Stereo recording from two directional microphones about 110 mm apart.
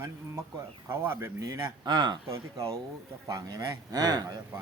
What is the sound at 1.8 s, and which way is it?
Speech, 40° right (ahead or behind).